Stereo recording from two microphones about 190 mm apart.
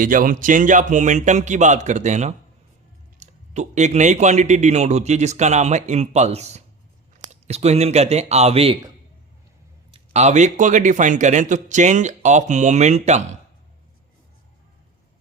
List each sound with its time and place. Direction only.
0.0 s speech: 45° right (ahead or behind); by 8.9 s 30° right (ahead or behind)
9.9 s speech: 35° right (ahead or behind)